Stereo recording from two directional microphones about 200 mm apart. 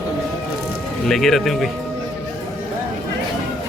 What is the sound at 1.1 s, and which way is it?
Speech, centre (ahead or behind).